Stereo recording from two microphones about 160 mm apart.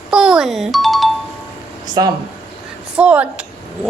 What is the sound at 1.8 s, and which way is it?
Speech, 25° right (ahead or behind).